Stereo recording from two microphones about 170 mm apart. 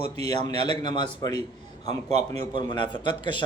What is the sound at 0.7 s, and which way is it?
Speech, 25° left (ahead or behind).